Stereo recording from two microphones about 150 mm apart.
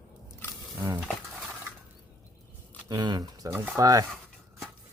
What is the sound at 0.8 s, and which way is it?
Stir, 15° right (ahead or behind).